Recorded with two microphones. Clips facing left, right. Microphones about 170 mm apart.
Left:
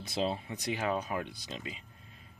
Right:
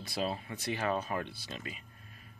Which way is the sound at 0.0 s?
20° left (ahead or behind).